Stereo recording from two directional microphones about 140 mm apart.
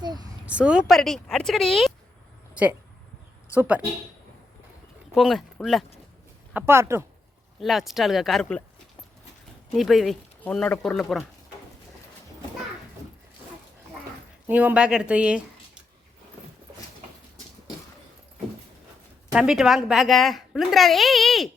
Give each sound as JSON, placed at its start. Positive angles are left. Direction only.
{"t": 0.0, "sound": "a sound", "side_deg": -30}
{"t": 0.4, "sound": "a woman's voice", "side_deg": -10}
{"t": 3.5, "sound": "speech", "side_deg": -10}
{"t": 5.1, "sound": "a woman's voice", "side_deg": 0}
{"t": 6.5, "sound": "speech", "side_deg": -15}
{"t": 7.6, "sound": "a woman's voice", "side_deg": 0}
{"t": 9.7, "sound": "a woman's voice", "side_deg": 0}
{"t": 14.4, "sound": "speech", "side_deg": -10}
{"t": 19.3, "sound": "a woman's voice", "side_deg": -5}